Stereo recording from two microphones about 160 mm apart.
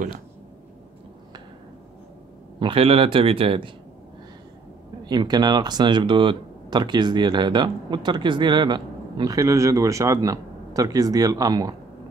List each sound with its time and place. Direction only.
2.6 s speech: 35° right (ahead or behind)
5.0 s speech: 25° right (ahead or behind)